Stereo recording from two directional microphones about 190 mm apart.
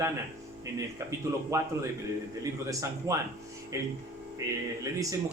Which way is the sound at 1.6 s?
15° right (ahead or behind).